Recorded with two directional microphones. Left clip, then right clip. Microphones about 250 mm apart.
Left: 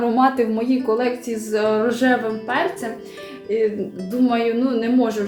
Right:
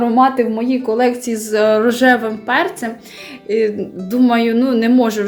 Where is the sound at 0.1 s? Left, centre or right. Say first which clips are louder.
Right 5 dB; right.